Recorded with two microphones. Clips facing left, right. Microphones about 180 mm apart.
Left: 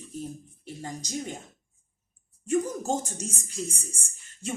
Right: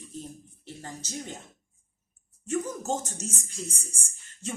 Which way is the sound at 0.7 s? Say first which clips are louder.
Left 4 dB; 15° left (ahead or behind).